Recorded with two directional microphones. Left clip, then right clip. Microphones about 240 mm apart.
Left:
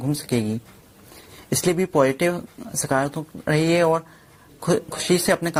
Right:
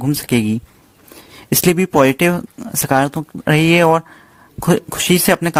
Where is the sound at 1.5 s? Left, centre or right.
Right.